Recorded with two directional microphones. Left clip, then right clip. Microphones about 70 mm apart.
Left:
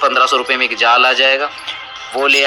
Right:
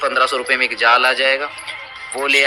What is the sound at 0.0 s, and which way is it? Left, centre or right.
Speech, left.